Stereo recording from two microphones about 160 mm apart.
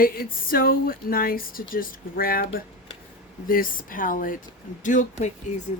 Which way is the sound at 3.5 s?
60° left (ahead or behind).